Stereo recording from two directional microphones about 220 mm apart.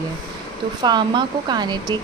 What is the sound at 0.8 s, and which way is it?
Speech, 20° right (ahead or behind).